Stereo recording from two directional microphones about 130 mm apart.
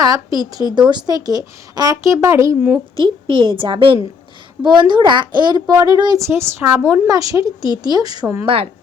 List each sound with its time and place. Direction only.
0.0 s a woman's voice: 30° right (ahead or behind)
2.9 s a child's voice: 45° right (ahead or behind); by 8.4 s 25° right (ahead or behind)